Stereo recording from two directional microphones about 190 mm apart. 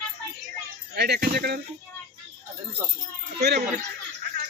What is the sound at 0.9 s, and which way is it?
Speech, 60° right (ahead or behind).